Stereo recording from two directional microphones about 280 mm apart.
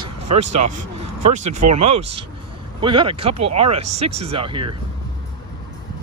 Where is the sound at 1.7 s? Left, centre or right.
Right.